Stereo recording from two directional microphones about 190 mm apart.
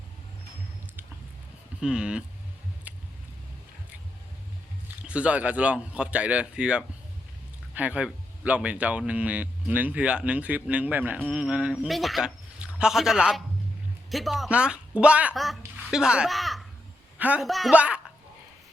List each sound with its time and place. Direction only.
1.8 s speech: 5° right (ahead or behind)
2.9 s a sound: 10° right (ahead or behind)
5.0 s speech: 5° right (ahead or behind)